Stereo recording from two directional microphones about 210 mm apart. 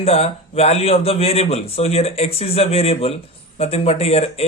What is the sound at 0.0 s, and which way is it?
Speech, 30° left (ahead or behind).